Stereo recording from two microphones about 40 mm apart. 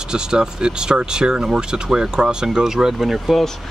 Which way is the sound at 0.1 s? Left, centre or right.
Centre.